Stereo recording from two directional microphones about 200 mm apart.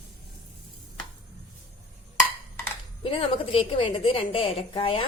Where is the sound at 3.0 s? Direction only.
30° left (ahead or behind).